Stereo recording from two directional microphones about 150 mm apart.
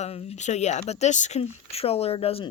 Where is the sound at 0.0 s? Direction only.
45° left (ahead or behind).